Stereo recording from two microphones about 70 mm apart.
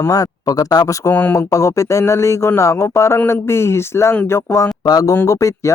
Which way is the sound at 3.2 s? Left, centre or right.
Left.